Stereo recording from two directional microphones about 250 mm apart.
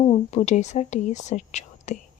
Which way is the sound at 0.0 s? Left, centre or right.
Left.